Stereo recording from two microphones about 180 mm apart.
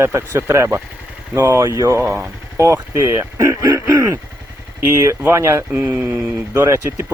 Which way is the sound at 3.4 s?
20° right (ahead or behind).